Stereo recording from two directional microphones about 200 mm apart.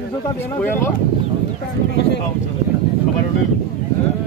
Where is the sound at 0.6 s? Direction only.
10° left (ahead or behind).